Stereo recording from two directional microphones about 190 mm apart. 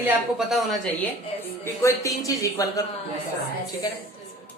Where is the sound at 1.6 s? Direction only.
15° left (ahead or behind).